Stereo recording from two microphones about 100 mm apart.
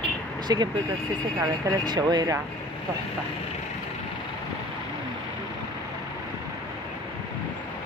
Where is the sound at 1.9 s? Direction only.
45° right (ahead or behind).